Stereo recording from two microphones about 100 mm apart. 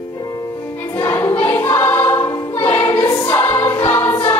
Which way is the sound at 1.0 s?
30° left (ahead or behind).